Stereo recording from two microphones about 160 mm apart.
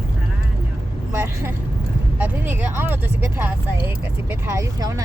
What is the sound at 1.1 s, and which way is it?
Vehicle, 15° right (ahead or behind).